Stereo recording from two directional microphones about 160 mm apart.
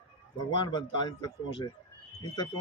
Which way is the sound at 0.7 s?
30° left (ahead or behind).